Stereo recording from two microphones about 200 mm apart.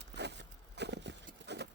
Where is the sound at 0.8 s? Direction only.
60° right (ahead or behind).